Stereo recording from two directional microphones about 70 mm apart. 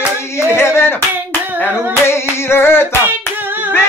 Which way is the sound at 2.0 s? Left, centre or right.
Left.